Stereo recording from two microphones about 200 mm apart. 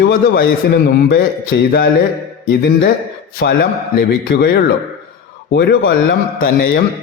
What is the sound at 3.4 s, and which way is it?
A man's voice, 60° left (ahead or behind).